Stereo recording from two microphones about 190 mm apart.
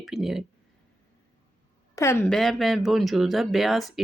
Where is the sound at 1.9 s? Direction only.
15° left (ahead or behind).